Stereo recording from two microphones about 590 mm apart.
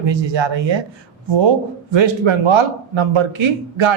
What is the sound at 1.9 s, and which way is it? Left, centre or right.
A man's voice, right.